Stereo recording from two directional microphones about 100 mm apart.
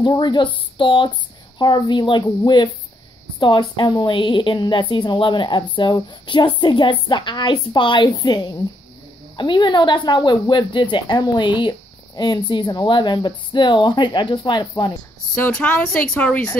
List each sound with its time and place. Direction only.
0.0 s a woman's voice: 45° left (ahead or behind)
9.4 s a woman's voice: 50° left (ahead or behind)
15.8 s a woman's voice: 15° left (ahead or behind)